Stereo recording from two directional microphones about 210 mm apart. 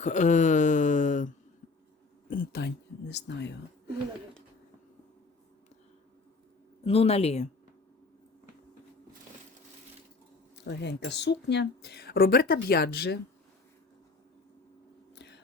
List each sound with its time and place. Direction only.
0.0 s a sound: 35° left (ahead or behind)
2.3 s speech: 45° left (ahead or behind)
6.8 s speech: 30° left (ahead or behind)
10.7 s speech: 55° left (ahead or behind)
15.1 s whispering: 55° left (ahead or behind)